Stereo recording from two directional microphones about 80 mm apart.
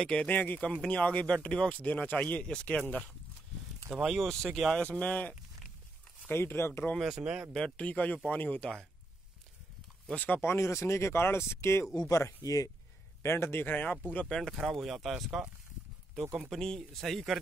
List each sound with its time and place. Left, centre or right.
0.0 s speech: centre
3.9 s speech: centre
4.7 s speech: centre
6.2 s a man's voice: left
7.0 s speech: centre
7.5 s a man's voice: centre
10.1 s a man's voice: left
10.4 s speech: left
12.4 s speech: left
13.2 s a man's voice: left
14.6 s speech: centre